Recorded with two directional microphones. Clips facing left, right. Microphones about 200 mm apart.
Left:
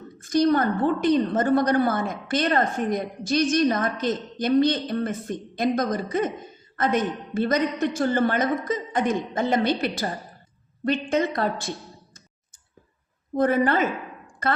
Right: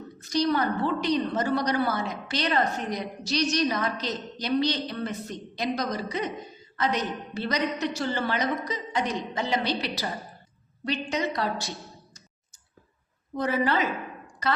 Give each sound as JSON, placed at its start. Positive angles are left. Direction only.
{"t": 0.2, "sound": "a woman's voice", "side_deg": 50}
{"t": 13.3, "sound": "a woman's voice", "side_deg": 50}